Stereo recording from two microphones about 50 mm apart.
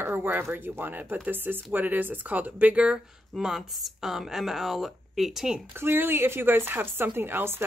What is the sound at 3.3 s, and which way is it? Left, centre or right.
Speech, centre.